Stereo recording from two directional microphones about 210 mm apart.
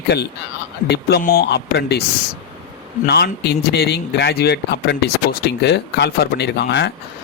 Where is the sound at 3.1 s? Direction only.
50° left (ahead or behind).